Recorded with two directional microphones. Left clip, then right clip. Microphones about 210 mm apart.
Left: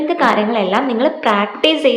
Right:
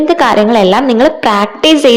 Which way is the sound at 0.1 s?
45° right (ahead or behind).